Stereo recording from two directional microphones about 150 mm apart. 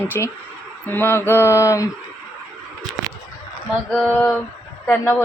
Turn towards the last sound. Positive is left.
turn(degrees=10)  # may be behind; listen again after turning